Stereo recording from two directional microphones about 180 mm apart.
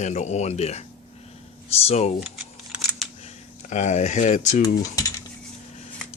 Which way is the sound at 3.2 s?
40° left (ahead or behind).